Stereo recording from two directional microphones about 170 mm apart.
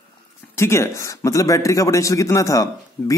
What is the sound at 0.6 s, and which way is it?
Speech, 15° left (ahead or behind).